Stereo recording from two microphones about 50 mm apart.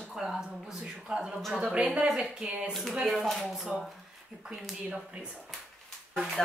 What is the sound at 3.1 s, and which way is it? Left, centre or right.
Speech, centre.